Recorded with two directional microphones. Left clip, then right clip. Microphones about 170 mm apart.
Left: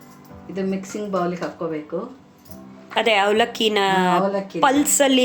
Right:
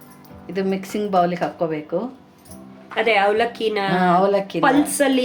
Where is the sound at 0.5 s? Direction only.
70° right (ahead or behind).